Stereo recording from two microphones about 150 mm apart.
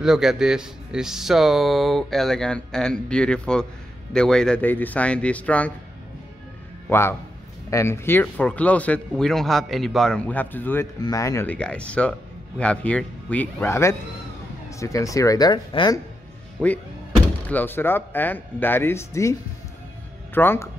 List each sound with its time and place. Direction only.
0.0 s speech: 5° right (ahead or behind)
6.9 s a man's voice: 15° left (ahead or behind)
11.0 s speech: 25° left (ahead or behind)
17.5 s speech: 15° left (ahead or behind)
20.3 s speech: 15° left (ahead or behind)